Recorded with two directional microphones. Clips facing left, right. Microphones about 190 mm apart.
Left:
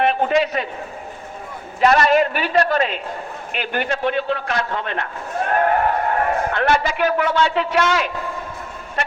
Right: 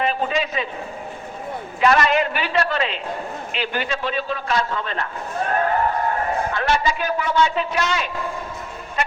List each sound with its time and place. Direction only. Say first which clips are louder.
0.0 s a man's voice: left 5 dB; 65° left (ahead or behind)
1.8 s a man's voice: left 3 dB; 40° left (ahead or behind); by 8.0 s 75° left (ahead or behind)